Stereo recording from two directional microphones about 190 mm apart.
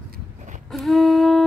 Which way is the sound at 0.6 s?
Centre (ahead or behind).